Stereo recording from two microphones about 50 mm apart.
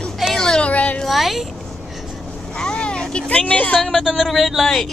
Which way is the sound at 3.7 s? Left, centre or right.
Centre.